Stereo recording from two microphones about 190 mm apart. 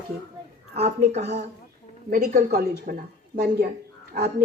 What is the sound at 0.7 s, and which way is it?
A woman's voice, 35° right (ahead or behind).